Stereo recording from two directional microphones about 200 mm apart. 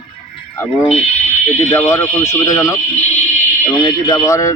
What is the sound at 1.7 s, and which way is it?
A man's voice, 15° left (ahead or behind).